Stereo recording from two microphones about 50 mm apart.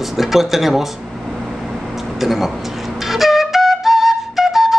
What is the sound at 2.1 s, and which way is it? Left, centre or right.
Speech, centre.